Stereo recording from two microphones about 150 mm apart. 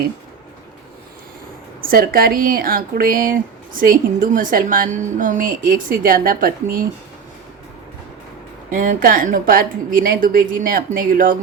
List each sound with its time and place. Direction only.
1.8 s speech: 80° right
8.7 s a woman's voice: 65° right (ahead or behind)